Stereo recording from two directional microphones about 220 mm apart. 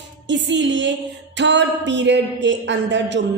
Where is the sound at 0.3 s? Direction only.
55° right (ahead or behind).